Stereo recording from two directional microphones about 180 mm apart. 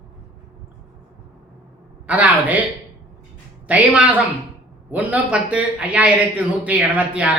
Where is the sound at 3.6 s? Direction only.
10° right (ahead or behind).